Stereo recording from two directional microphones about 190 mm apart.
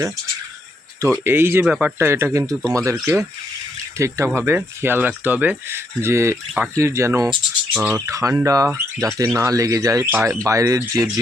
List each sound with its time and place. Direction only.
1.2 s speech: 10° right (ahead or behind)
7.9 s speech: 15° right (ahead or behind)